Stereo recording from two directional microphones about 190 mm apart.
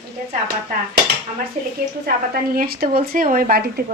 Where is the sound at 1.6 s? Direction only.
40° right (ahead or behind).